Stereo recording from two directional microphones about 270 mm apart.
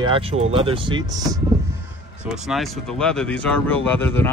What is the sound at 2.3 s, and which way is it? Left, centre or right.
Speech, centre.